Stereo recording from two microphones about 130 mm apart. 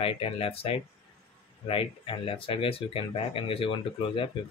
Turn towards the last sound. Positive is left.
turn(degrees=45)  # may be behind; listen again after turning